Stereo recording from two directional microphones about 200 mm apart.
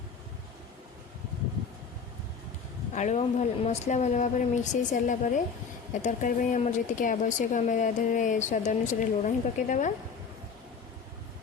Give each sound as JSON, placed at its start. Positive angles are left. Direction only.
{"t": 2.9, "sound": "speech", "side_deg": 35}